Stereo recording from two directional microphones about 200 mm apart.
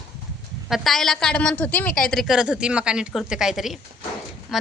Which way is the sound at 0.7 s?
Centre (ahead or behind).